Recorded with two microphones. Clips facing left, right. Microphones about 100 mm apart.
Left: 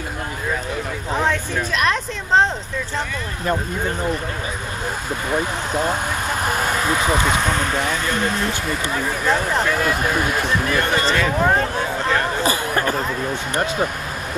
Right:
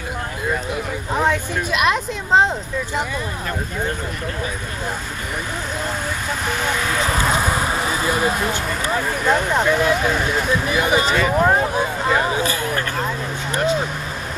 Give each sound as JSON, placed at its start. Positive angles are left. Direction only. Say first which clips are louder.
{"t": 1.1, "sound": "vehicle", "louder": "right 1 dB", "side_deg": 0}
{"t": 6.4, "sound": "speech", "louder": "left 2 dB", "side_deg": 45}
{"t": 6.9, "sound": "speech", "louder": "left 1 dB", "side_deg": 5}
{"t": 10.7, "sound": "speech", "louder": "right 2 dB", "side_deg": -10}
{"t": 12.4, "sound": "speech", "louder": "left 2 dB", "side_deg": 20}